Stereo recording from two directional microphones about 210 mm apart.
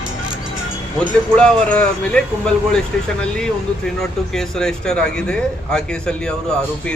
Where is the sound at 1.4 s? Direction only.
5° left (ahead or behind).